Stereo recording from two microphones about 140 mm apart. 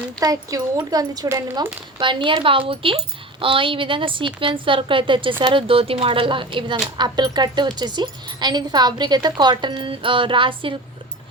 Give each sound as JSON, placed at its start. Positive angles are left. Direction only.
{"t": 0.2, "sound": "a woman's voice", "side_deg": -25}